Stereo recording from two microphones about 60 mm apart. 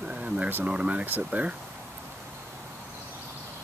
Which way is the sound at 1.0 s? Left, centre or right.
Right.